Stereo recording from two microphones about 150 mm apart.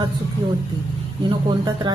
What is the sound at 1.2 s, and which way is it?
Speech, 30° right (ahead or behind).